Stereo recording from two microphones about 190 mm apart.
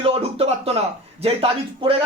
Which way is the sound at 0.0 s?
30° right (ahead or behind).